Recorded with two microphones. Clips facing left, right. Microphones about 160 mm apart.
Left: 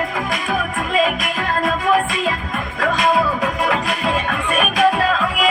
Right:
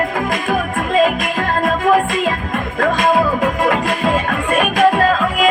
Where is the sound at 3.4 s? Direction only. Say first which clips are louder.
Right 4 dB; 50° right (ahead or behind).